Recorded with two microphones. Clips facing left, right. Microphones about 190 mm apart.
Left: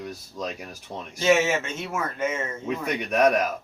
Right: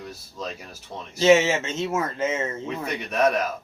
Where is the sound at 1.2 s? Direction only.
25° right (ahead or behind).